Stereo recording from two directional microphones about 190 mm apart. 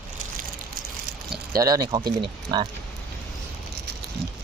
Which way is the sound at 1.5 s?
20° right (ahead or behind).